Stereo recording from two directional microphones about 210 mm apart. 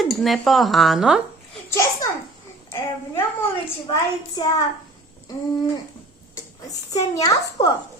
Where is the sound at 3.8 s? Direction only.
20° left (ahead or behind).